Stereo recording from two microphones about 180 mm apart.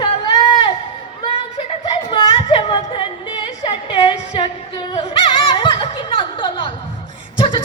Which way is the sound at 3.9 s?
30° left (ahead or behind).